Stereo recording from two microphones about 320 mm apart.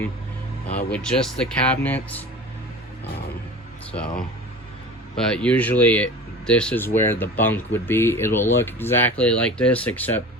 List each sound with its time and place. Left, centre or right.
0.7 s speech: left
0.9 s speech: centre
5.1 s speech: centre